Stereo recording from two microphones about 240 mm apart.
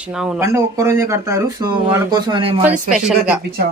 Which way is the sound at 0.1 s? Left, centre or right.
Centre.